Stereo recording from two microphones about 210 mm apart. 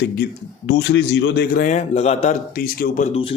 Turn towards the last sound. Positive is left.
turn(degrees=45)  # may be behind; listen again after turning